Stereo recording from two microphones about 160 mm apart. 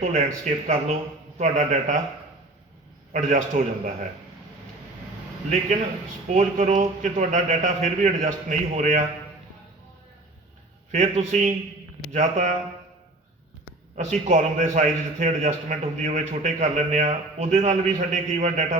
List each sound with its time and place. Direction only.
0.0 s a man's voice: 50° right (ahead or behind)
3.1 s a man's voice: 50° right (ahead or behind)
6.2 s a man's voice: 50° right (ahead or behind)
10.9 s a man's voice: 50° right (ahead or behind)
13.9 s a man's voice: 50° right (ahead or behind)